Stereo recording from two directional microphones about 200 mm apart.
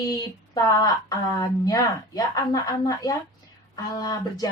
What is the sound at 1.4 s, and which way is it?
Speech, 15° left (ahead or behind).